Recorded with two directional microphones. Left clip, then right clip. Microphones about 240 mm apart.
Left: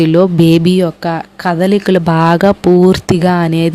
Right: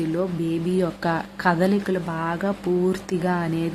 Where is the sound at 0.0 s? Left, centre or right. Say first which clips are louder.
Left 16 dB; left.